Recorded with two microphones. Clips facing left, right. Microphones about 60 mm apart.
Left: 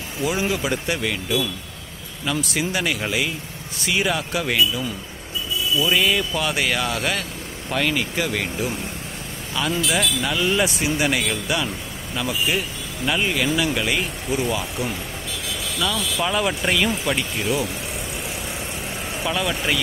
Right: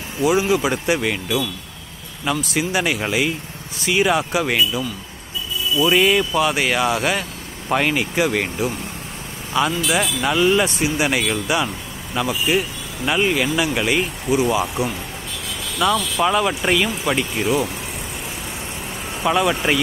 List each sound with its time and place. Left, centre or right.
0.2 s speech: centre
2.4 s speech: centre
2.8 s speech: centre
5.9 s speech: centre
9.6 s speech: centre
10.6 s speech: centre
15.8 s speech: right
16.2 s speech: centre
19.2 s speech: centre